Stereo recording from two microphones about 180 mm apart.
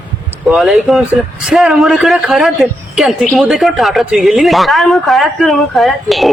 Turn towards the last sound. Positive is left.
turn(degrees=0)  # may be behind; listen again after turning